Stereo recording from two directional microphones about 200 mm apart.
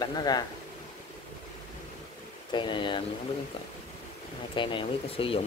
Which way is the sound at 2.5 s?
25° left (ahead or behind).